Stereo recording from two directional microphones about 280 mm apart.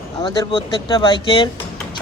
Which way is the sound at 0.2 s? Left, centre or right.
Centre.